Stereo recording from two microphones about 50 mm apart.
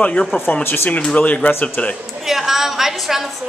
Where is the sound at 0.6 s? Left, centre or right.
Left.